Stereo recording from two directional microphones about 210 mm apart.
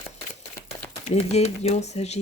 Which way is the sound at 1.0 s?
30° left (ahead or behind).